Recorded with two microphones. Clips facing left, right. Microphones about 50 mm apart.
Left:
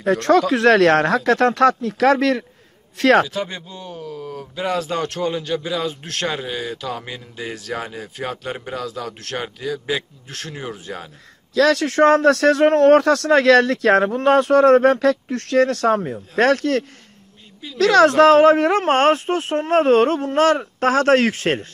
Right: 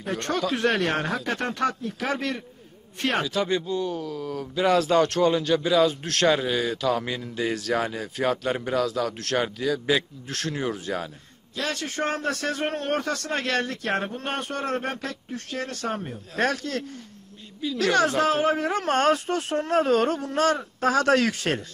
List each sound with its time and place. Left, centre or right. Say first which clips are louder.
0.0 s speech: left 11 dB; left
3.3 s a man's voice: right 2 dB; centre
11.5 s speech: left 13 dB; left
16.3 s speech: left 9 dB; left
17.7 s speech: left 9 dB; left
18.8 s speech: left 6 dB; left
21.0 s speech: left 7 dB; left